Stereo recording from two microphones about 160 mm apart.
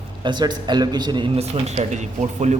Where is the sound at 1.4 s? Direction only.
40° right (ahead or behind).